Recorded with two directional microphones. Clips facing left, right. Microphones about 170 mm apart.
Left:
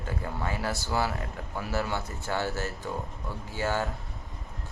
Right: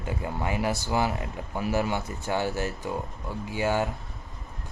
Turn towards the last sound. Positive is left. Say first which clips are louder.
# right 4 dB
turn(degrees=-15)  # may be behind; listen again after turning